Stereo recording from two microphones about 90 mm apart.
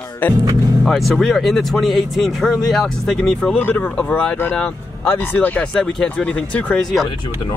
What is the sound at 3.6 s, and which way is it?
Speech, 20° left (ahead or behind).